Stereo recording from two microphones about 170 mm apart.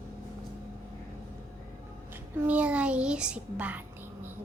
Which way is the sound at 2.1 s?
10° right (ahead or behind).